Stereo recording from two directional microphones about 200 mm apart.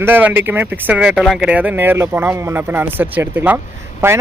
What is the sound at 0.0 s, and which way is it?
Speech, 10° right (ahead or behind).